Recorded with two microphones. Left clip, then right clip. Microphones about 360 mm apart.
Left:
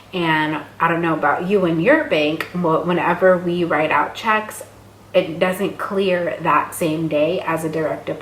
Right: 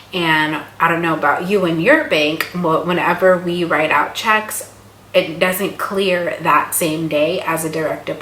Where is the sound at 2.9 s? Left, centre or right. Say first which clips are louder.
Right 2 dB; centre.